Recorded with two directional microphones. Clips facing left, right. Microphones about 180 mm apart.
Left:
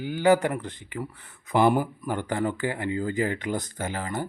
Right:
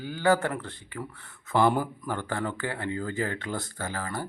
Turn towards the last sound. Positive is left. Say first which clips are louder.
# left 3 dB
turn(degrees=20)  # may be behind; listen again after turning